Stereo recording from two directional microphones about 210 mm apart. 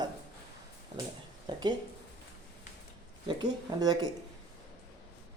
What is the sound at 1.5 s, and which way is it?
Speech, 20° right (ahead or behind).